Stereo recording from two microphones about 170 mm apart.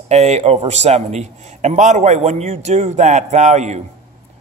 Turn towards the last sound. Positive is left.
turn(degrees=-45)  # may be behind; listen again after turning